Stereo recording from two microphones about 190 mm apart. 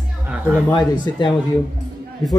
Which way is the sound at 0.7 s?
20° left (ahead or behind).